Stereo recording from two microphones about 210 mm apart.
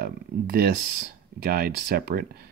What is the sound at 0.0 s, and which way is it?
Speech, 45° right (ahead or behind).